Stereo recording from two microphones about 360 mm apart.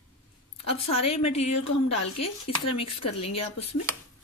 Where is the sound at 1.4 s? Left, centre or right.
Left.